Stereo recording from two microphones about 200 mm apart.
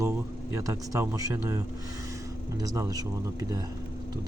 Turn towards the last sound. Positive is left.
turn(degrees=-15)  # may be behind; listen again after turning